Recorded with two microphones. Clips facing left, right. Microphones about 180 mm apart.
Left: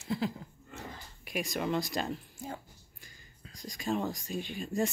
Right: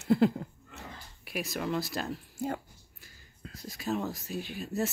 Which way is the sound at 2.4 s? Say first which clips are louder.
Right 10 dB; 65° right (ahead or behind).